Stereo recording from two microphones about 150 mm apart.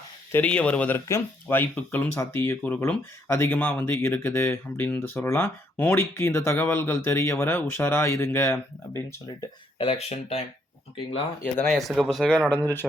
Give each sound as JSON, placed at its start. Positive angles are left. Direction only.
{"t": 0.3, "sound": "speech", "side_deg": 10}
{"t": 9.7, "sound": "speech", "side_deg": 40}
{"t": 11.7, "sound": "speech", "side_deg": 0}
{"t": 12.3, "sound": "speech", "side_deg": 10}